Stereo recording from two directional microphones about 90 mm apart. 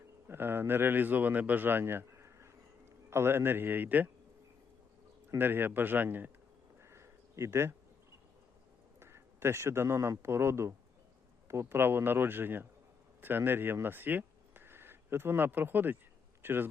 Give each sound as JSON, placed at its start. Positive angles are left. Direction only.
{"t": 0.3, "sound": "speech", "side_deg": -25}
{"t": 5.4, "sound": "speech", "side_deg": -25}
{"t": 6.8, "sound": "a sound", "side_deg": -30}
{"t": 9.0, "sound": "a man's voice", "side_deg": -30}